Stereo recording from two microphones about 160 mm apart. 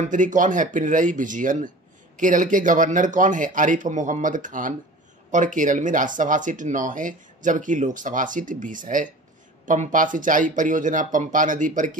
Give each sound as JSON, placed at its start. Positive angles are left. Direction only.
{"t": 0.1, "sound": "speech", "side_deg": -55}